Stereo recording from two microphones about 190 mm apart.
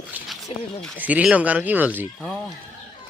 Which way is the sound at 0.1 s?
10° right (ahead or behind).